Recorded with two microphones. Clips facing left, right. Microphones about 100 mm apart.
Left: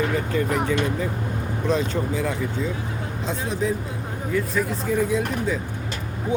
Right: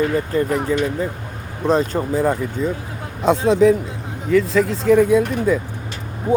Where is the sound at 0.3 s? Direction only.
40° right (ahead or behind).